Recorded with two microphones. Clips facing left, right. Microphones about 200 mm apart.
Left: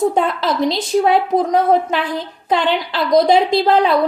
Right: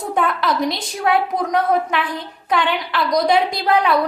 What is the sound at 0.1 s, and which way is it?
A woman's voice, 25° left (ahead or behind).